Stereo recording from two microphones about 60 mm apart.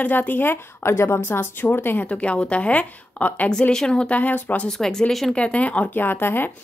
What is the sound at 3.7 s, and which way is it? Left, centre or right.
Speech, centre.